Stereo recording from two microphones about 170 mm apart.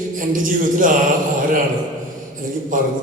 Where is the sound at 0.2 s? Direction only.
50° right (ahead or behind).